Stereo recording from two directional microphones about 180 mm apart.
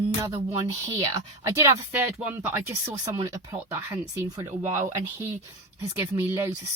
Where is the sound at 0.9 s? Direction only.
15° right (ahead or behind).